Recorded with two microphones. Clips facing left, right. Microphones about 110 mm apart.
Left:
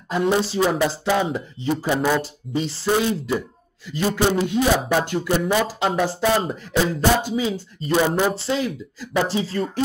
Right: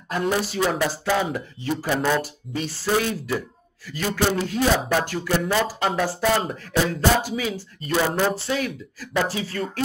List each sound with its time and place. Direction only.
0.1 s speech: 25° left (ahead or behind)
2.0 s speech: centre (ahead or behind)
2.5 s speech: 25° left (ahead or behind)